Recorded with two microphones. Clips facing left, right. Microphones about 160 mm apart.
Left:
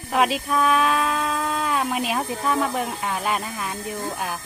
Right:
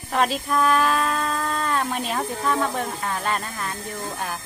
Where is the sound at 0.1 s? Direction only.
5° left (ahead or behind).